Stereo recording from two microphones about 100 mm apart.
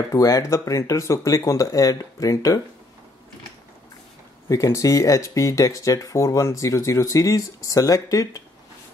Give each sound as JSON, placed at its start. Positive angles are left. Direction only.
{"t": 0.1, "sound": "speech", "side_deg": 35}
{"t": 4.5, "sound": "speech", "side_deg": 35}